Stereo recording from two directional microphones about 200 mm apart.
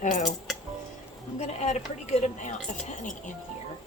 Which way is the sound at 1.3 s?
35° left (ahead or behind).